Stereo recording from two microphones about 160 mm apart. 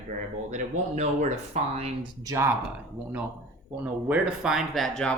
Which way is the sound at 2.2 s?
20° right (ahead or behind).